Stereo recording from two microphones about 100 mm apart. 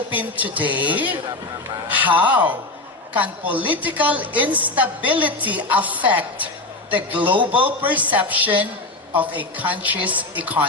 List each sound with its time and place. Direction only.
0.2 s a woman's voice: 15° right (ahead or behind)